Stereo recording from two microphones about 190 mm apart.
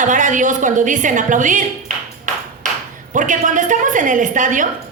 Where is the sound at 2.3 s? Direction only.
40° right (ahead or behind).